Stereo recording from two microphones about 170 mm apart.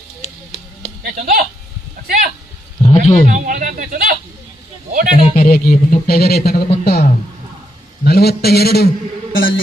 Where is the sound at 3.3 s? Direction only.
50° right (ahead or behind).